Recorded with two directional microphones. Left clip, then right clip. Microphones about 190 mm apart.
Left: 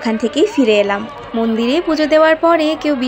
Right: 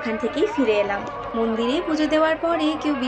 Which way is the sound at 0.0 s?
50° left (ahead or behind).